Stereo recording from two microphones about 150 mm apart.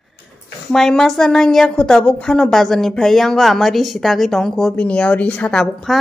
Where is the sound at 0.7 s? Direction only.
5° left (ahead or behind).